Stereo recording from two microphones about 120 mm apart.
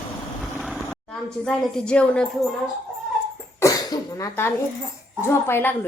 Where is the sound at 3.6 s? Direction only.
30° left (ahead or behind).